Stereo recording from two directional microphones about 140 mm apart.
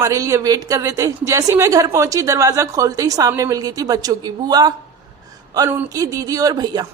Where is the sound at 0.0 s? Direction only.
25° right (ahead or behind).